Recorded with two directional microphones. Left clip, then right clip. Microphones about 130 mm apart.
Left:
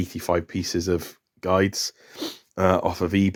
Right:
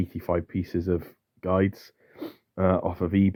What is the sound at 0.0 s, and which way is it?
Speech, 15° left (ahead or behind).